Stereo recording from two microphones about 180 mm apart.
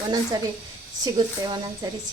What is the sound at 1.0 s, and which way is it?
Speech, 25° right (ahead or behind).